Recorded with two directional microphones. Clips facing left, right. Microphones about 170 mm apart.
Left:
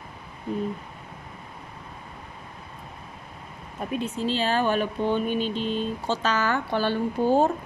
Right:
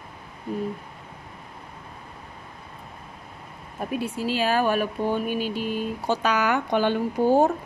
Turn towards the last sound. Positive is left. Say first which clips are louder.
# right 2 dB
turn(degrees=-15)  # may be behind; listen again after turning